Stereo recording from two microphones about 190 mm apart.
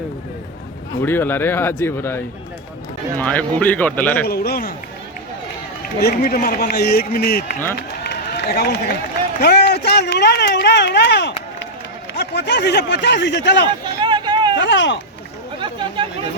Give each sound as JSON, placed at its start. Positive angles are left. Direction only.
{"t": 1.0, "sound": "speech", "side_deg": 10}
{"t": 4.3, "sound": "a man's voice", "side_deg": 55}
{"t": 6.0, "sound": "a man's voice", "side_deg": 55}
{"t": 7.8, "sound": "run", "side_deg": 60}
{"t": 9.4, "sound": "speech", "side_deg": 60}
{"t": 14.0, "sound": "a sound", "side_deg": -25}
{"t": 14.6, "sound": "speech", "side_deg": 70}
{"t": 15.6, "sound": "chatter", "side_deg": -25}